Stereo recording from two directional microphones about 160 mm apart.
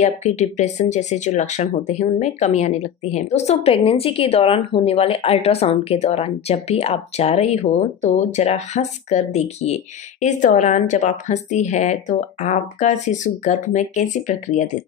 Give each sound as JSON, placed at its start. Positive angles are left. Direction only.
{"t": 0.0, "sound": "speech", "side_deg": 45}